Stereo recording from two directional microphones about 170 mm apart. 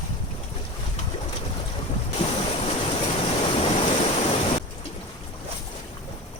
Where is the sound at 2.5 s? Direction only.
35° left (ahead or behind).